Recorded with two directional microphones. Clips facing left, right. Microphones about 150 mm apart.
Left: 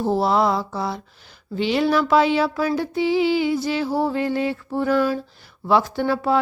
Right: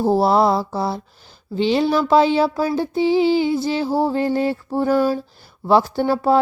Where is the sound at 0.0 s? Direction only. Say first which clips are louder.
Right 3 dB; 35° right (ahead or behind).